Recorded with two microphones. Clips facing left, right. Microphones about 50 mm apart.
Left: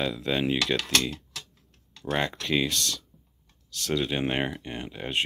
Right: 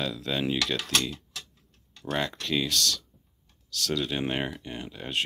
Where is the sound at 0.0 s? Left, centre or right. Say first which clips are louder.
Left 3 dB; left.